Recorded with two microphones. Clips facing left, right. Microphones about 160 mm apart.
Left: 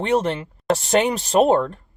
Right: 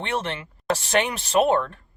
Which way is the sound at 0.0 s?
35° left (ahead or behind).